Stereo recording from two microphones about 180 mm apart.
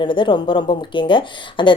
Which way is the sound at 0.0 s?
25° left (ahead or behind).